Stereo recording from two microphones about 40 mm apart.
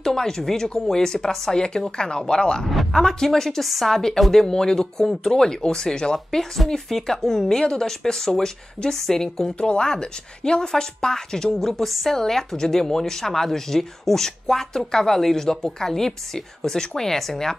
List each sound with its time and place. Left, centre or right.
0.0 s a woman's voice: centre
2.7 s a woman's voice: centre
3.9 s speech: centre
5.3 s speech: centre
9.6 s speech: left